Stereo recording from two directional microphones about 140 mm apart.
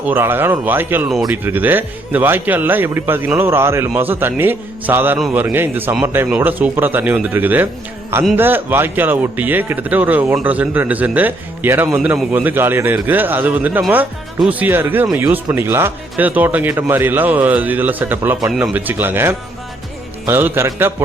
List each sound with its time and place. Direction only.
0.0 s speech: 15° right (ahead or behind)
18.3 s speech: 5° right (ahead or behind)